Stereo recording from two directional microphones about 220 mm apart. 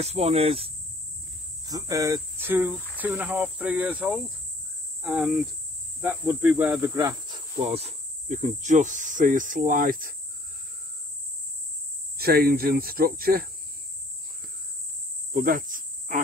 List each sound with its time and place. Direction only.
0.0 s speech: 30° right (ahead or behind)
1.7 s speech: 15° right (ahead or behind)
5.0 s cricket: centre (ahead or behind)
5.9 s speech: 10° right (ahead or behind); by 10.1 s 40° right (ahead or behind)
12.2 s speech: 45° right (ahead or behind)
15.3 s cricket: 40° right (ahead or behind)